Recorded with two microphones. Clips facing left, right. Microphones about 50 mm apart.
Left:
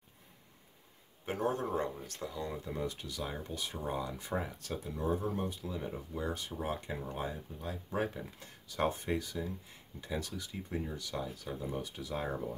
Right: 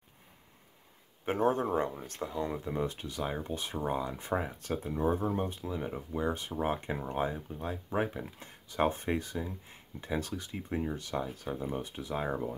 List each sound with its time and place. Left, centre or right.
1.2 s speech: right